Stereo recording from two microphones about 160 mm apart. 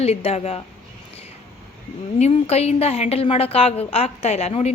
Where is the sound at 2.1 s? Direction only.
40° left (ahead or behind).